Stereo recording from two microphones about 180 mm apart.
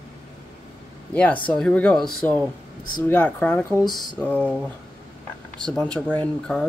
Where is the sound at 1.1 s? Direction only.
5° left (ahead or behind).